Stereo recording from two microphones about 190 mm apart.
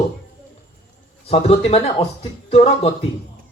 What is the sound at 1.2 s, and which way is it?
Speech, 30° left (ahead or behind).